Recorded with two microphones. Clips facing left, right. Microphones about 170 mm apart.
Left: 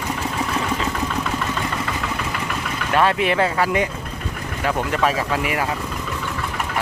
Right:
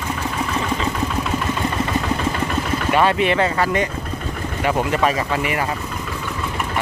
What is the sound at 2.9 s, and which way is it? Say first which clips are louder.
Speech: right 1 dB; centre (ahead or behind).